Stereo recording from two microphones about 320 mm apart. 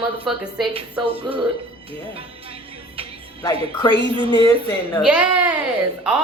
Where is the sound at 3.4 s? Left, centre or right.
Centre.